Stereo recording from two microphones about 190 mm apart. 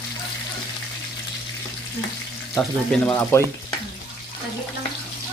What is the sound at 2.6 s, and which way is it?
Speech, 5° left (ahead or behind).